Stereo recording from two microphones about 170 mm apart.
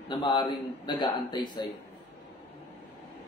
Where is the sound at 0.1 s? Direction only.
25° left (ahead or behind).